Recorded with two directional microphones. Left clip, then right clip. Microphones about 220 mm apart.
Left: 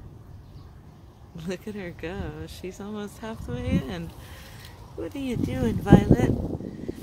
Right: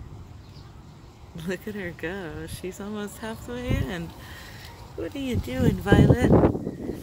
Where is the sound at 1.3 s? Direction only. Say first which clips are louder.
Right 2 dB; centre (ahead or behind).